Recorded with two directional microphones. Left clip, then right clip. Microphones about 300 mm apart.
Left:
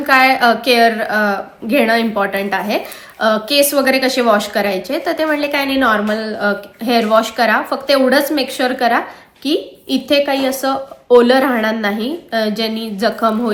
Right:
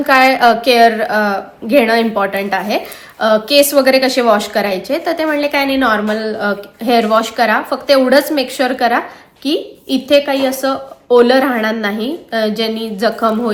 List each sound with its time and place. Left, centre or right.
0.0 s a woman's voice: centre